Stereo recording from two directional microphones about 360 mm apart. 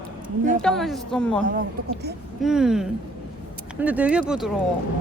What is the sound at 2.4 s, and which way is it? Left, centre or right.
Speech, centre.